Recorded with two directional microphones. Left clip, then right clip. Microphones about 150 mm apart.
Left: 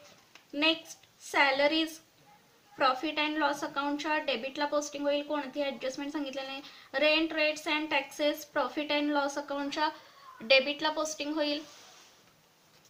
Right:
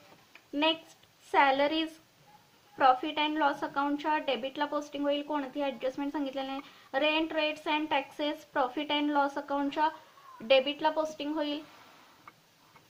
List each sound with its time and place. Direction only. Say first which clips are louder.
1.3 s a woman's voice: right 1 dB; 35° right (ahead or behind)